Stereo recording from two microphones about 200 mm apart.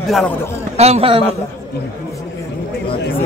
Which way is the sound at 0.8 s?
30° right (ahead or behind).